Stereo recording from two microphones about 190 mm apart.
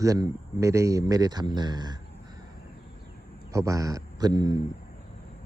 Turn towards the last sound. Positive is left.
turn(degrees=-20)  # may be behind; listen again after turning